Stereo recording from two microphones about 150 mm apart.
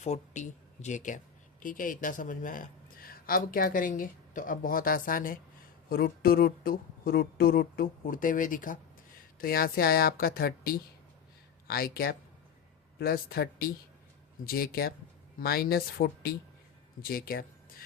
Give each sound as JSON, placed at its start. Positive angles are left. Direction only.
{"t": 0.0, "sound": "speech", "side_deg": 50}
{"t": 5.9, "sound": "speech", "side_deg": 80}
{"t": 9.4, "sound": "a woman's voice", "side_deg": 80}